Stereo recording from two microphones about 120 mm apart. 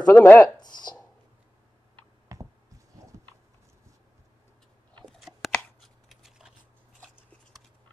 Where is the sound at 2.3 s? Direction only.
25° right (ahead or behind).